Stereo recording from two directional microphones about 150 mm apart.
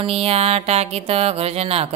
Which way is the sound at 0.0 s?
40° right (ahead or behind).